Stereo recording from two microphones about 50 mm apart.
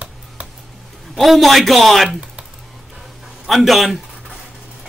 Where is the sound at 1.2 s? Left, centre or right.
Centre.